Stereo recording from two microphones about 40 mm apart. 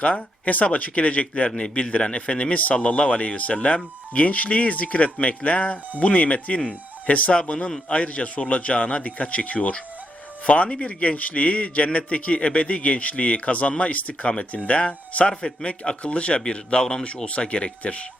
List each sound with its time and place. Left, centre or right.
0.0 s a man's voice: left
1.5 s a man's voice: left
7.5 s a man's voice: left